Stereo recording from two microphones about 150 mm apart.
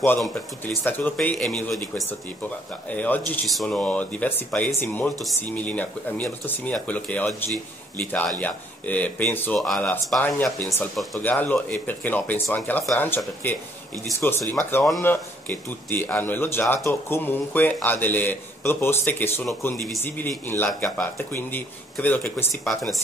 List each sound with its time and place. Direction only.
0.8 s speech: 10° left (ahead or behind)
2.9 s speech: 10° left (ahead or behind)
22.7 s speech: centre (ahead or behind)